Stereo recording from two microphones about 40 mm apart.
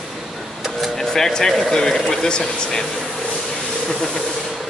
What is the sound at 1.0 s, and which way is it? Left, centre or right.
Speech, centre.